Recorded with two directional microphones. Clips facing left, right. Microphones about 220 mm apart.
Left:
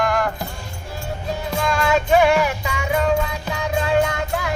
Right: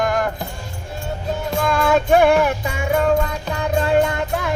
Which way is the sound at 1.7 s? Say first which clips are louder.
Right 2 dB; 55° right (ahead or behind).